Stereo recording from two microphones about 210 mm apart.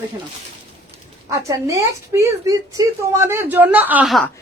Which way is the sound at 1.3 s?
15° right (ahead or behind).